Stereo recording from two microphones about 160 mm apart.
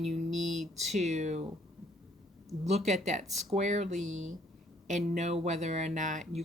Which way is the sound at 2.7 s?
45° right (ahead or behind).